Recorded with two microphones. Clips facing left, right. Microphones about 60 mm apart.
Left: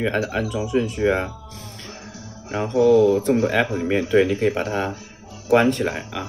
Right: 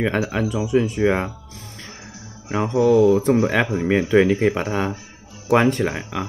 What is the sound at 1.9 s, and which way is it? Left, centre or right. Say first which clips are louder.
Music: left 2 dB; centre.